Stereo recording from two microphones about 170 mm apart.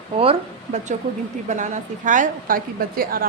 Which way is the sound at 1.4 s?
45° right (ahead or behind).